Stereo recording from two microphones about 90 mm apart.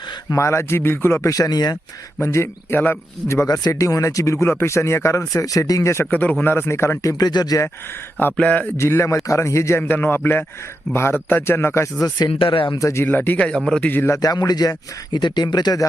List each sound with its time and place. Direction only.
0.3 s speech: 30° left (ahead or behind); by 1.8 s 50° left (ahead or behind)
2.2 s speech: 30° left (ahead or behind)
6.1 s speech: 15° left (ahead or behind); by 7.6 s 50° left (ahead or behind)
8.2 s speech: 15° left (ahead or behind)
8.8 s speech: 30° left (ahead or behind)
12.3 s speech: 80° left
12.8 s speech: 35° left (ahead or behind)
13.1 s speech: 20° left (ahead or behind)
14.2 s speech: 45° left (ahead or behind)